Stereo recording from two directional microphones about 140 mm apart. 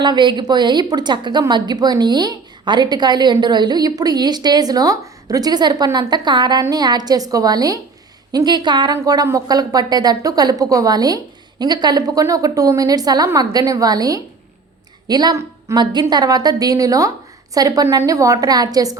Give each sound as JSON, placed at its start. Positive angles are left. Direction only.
{"t": 0.0, "sound": "a woman's voice", "side_deg": -35}